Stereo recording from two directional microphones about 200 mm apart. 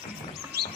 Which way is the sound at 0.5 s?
50° right (ahead or behind).